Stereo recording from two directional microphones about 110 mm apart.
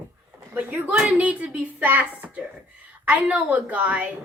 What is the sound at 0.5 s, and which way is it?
A woman's voice, 15° right (ahead or behind).